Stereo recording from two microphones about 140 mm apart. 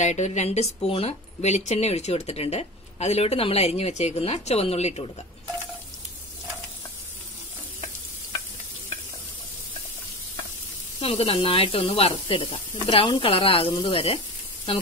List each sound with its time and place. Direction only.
0.0 s speech: 55° left (ahead or behind)
11.0 s speech: 45° left (ahead or behind)